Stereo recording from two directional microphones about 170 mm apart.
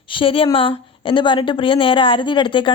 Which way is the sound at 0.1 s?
30° left (ahead or behind).